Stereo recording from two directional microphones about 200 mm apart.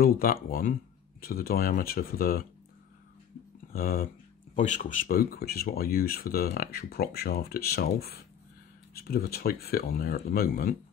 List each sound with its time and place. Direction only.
0.0 s speech: 45° left (ahead or behind)
3.7 s speech: 45° left (ahead or behind)